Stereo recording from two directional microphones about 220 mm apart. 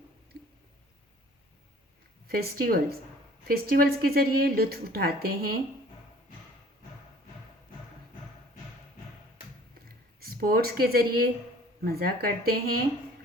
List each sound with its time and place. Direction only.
2.2 s a woman's voice: 45° right (ahead or behind)
9.7 s a sound: 40° right (ahead or behind)
11.9 s a woman's voice: 45° right (ahead or behind)